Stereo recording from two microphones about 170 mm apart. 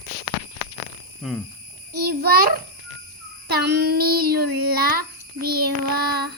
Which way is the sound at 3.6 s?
75° right (ahead or behind).